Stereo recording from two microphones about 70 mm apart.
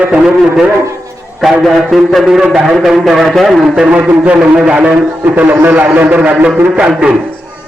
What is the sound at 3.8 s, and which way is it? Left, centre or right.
A man's voice, centre.